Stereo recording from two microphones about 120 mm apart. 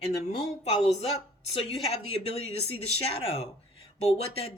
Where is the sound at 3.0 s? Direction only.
55° left (ahead or behind).